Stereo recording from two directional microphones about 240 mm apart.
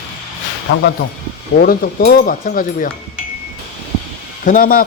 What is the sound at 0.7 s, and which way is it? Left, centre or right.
Speech, left.